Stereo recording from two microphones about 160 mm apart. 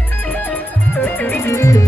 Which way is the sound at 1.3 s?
15° left (ahead or behind).